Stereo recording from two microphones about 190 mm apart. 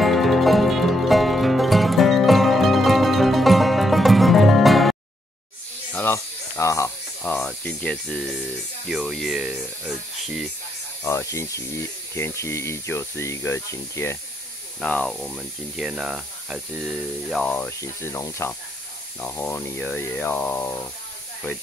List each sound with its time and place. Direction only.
0.0 s music: centre (ahead or behind)
5.9 s a sound: 10° left (ahead or behind)
8.8 s speech: 5° right (ahead or behind)
11.1 s speech: 15° left (ahead or behind)